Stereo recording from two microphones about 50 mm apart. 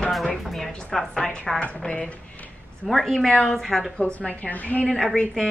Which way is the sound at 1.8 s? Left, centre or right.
Centre.